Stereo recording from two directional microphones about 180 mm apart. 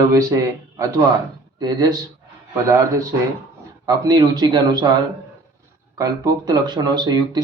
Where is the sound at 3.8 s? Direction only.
20° right (ahead or behind).